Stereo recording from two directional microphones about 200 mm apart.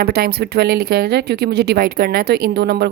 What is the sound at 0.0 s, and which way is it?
A woman's voice, 50° right (ahead or behind).